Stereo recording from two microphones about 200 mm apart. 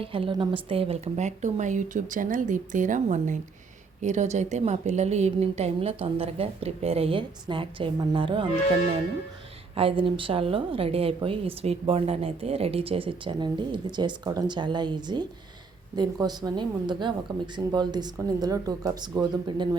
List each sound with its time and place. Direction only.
0.0 s a woman's voice: 25° right (ahead or behind)
9.7 s a woman's voice: 25° right (ahead or behind)